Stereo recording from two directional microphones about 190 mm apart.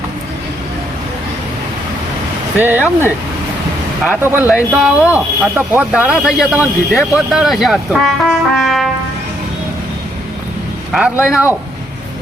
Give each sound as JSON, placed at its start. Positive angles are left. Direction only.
{"t": 2.6, "sound": "speech", "side_deg": -10}
{"t": 4.2, "sound": "speech", "side_deg": -10}
{"t": 10.9, "sound": "speech", "side_deg": -5}